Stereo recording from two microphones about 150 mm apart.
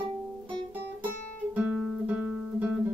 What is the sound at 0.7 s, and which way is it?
Guitar, 10° right (ahead or behind).